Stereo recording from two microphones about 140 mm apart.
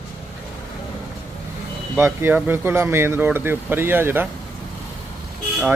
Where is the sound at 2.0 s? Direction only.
15° right (ahead or behind).